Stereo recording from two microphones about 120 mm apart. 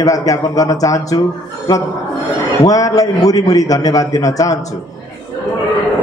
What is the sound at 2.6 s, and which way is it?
A man's voice, 30° left (ahead or behind).